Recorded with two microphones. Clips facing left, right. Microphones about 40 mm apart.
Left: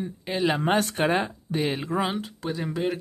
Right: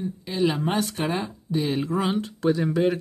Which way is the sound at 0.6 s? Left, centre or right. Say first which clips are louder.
Left 2 dB; left.